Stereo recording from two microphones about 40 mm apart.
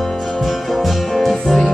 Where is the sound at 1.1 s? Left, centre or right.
Centre.